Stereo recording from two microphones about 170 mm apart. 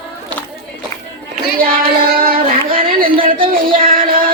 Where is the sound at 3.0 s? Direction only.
55° right (ahead or behind).